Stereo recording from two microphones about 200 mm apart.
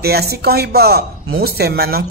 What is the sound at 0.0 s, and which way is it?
A woman's voice, 50° right (ahead or behind).